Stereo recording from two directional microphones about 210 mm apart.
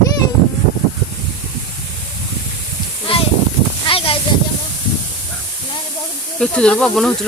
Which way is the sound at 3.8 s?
25° left (ahead or behind).